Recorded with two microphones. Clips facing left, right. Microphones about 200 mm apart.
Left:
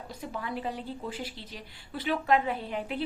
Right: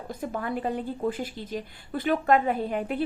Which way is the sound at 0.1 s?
50° right (ahead or behind).